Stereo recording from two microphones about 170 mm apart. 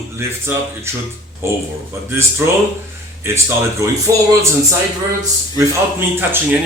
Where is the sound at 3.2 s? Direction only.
15° right (ahead or behind).